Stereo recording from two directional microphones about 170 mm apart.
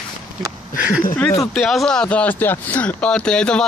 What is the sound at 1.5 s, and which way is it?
Speech, centre (ahead or behind).